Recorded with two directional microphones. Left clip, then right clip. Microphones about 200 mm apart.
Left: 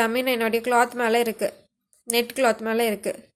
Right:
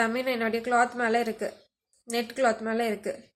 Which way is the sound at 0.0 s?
40° left (ahead or behind).